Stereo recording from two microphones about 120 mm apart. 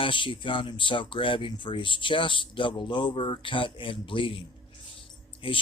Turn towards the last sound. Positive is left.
turn(degrees=45)  # may be behind; listen again after turning